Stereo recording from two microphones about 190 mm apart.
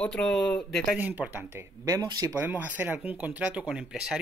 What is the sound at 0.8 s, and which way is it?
Speech, 10° right (ahead or behind).